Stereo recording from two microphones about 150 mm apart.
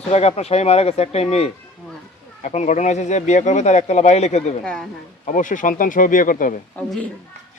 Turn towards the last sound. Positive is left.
turn(degrees=10)  # may be behind; listen again after turning